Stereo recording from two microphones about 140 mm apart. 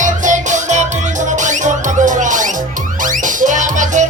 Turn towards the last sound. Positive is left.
turn(degrees=-65)  # may be behind; listen again after turning